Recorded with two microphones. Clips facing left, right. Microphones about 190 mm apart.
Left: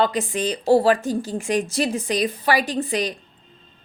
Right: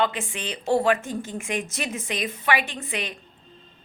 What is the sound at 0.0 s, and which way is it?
A woman's voice, 35° left (ahead or behind).